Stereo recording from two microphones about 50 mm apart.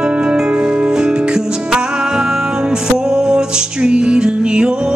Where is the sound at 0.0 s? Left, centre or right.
Centre.